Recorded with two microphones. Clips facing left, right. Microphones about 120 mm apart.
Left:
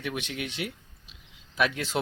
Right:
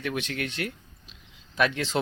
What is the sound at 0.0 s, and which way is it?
Speech, 10° left (ahead or behind).